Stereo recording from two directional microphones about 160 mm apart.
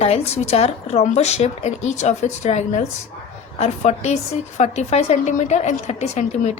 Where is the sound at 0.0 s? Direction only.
40° left (ahead or behind).